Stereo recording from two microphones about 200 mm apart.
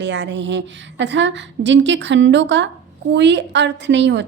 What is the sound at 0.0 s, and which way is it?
A woman's voice, 60° right (ahead or behind).